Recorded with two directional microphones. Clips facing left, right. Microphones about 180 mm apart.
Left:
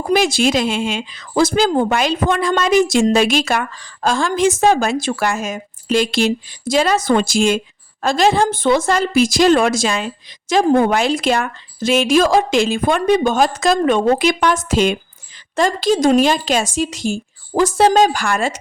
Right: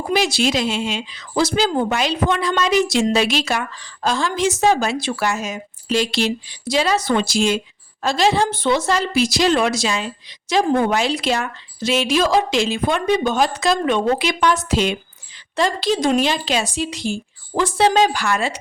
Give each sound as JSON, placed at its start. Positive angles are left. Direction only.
{"t": 0.1, "sound": "a woman's voice", "side_deg": 50}